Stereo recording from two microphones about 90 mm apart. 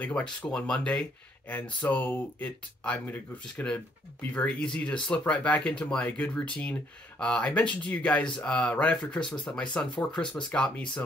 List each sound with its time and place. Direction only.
0.0 s speech: 10° left (ahead or behind)